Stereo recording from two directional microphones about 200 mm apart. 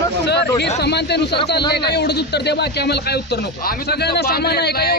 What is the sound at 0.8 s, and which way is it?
A man's voice, 55° left (ahead or behind).